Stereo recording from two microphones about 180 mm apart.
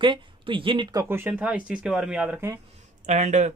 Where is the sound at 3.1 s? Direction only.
40° right (ahead or behind).